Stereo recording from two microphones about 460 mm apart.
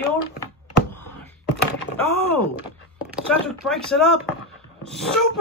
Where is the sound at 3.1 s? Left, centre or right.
Centre.